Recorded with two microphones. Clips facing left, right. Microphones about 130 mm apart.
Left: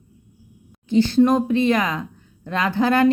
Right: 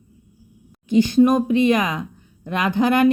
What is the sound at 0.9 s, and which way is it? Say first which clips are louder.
A woman's voice: right 1 dB; 15° right (ahead or behind).